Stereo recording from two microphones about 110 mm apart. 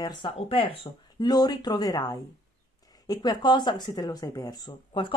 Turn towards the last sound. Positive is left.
turn(degrees=45)  # may be behind; listen again after turning